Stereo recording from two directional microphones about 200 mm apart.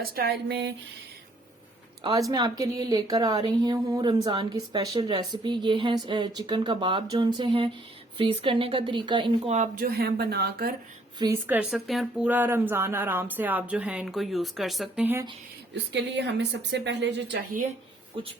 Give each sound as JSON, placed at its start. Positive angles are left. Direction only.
{"t": 0.0, "sound": "speech", "side_deg": -50}
{"t": 2.3, "sound": "speech", "side_deg": -20}
{"t": 9.5, "sound": "speech", "side_deg": -40}
{"t": 11.2, "sound": "speech", "side_deg": -15}
{"t": 15.9, "sound": "a woman's voice", "side_deg": -60}